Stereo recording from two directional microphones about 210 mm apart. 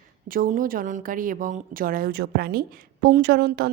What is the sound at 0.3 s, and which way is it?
Speech, 40° right (ahead or behind).